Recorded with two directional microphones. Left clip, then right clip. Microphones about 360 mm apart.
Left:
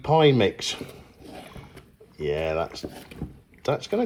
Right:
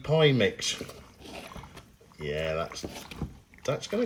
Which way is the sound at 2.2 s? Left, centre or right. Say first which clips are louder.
Left 5 dB; centre.